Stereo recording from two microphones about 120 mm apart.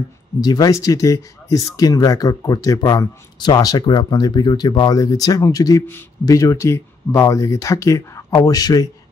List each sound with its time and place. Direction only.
0.4 s speech: 30° left (ahead or behind)